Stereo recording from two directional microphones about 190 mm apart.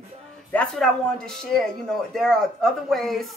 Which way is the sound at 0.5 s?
5° left (ahead or behind).